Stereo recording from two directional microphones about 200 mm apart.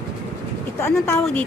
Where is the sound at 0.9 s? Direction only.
5° left (ahead or behind).